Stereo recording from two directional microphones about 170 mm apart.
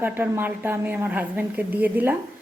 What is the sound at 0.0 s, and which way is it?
A woman's voice, 10° right (ahead or behind).